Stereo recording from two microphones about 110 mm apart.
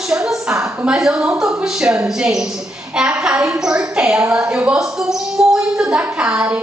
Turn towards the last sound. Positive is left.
turn(degrees=-10)  # may be behind; listen again after turning